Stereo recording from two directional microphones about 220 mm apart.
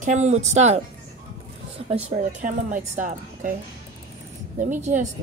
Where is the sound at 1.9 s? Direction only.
35° right (ahead or behind).